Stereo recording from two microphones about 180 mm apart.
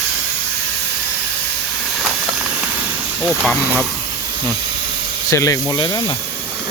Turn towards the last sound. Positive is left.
turn(degrees=15)  # may be behind; listen again after turning